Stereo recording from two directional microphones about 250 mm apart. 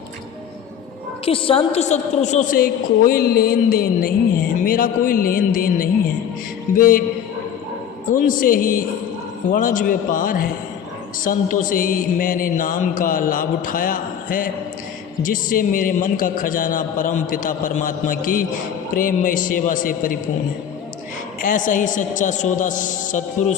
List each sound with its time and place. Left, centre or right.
1.2 s a woman's voice: left
8.1 s a woman's voice: left
21.4 s a woman's voice: left